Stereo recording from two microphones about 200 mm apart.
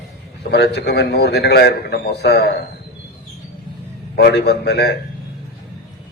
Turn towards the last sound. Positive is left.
turn(degrees=55)  # may be behind; listen again after turning